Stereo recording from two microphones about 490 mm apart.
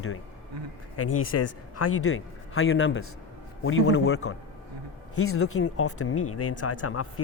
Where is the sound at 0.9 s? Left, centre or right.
Left.